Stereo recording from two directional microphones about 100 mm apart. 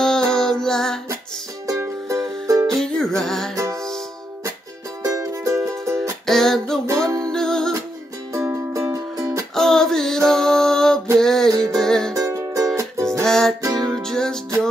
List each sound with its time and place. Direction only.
0.0 s music: 5° left (ahead or behind)
1.7 s music: 35° right (ahead or behind)
2.8 s music: 5° left (ahead or behind)
5.0 s music: 35° right (ahead or behind)
6.2 s music: 5° left (ahead or behind)
8.3 s music: 30° right (ahead or behind)
9.6 s music: 5° left (ahead or behind)
12.1 s music: 30° right (ahead or behind)
13.2 s music: 5° left (ahead or behind)
13.6 s music: 35° right (ahead or behind)
13.9 s music: 5° left (ahead or behind)